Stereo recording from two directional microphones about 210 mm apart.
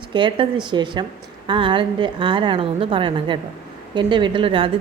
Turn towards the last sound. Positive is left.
turn(degrees=-25)  # may be behind; listen again after turning